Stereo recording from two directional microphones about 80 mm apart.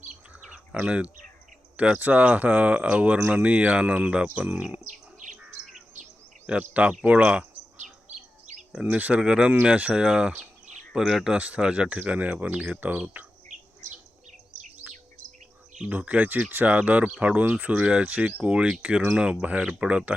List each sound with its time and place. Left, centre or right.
0.1 s bird vocalization: centre
1.7 s speech: centre
6.5 s speech: centre
8.7 s speech: centre
14.8 s chirp: right
15.9 s speech: centre